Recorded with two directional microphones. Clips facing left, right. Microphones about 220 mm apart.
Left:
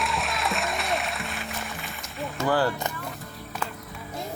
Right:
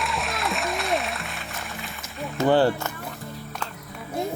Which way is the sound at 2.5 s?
25° right (ahead or behind).